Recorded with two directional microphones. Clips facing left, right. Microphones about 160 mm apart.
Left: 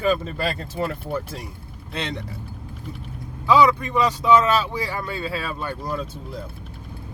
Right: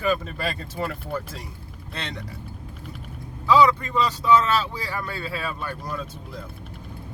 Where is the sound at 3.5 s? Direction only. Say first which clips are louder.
Left 1 dB; 15° left (ahead or behind).